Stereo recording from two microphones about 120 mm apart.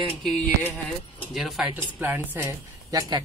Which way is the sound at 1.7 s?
15° right (ahead or behind).